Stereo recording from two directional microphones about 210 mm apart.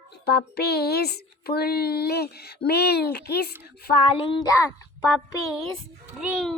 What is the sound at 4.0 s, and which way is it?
Speech, 25° left (ahead or behind).